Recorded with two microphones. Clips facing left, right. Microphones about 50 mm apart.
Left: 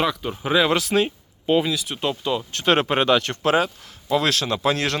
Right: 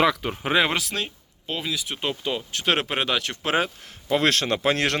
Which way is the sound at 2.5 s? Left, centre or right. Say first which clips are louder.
Left 5 dB; centre.